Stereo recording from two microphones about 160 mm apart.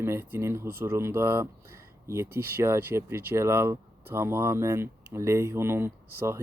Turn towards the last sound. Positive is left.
turn(degrees=-15)  # may be behind; listen again after turning